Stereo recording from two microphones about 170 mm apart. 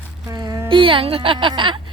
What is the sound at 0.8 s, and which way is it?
Speech, 30° right (ahead or behind).